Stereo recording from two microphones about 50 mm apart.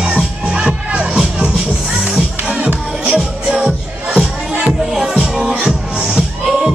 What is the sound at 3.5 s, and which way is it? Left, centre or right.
Music, centre.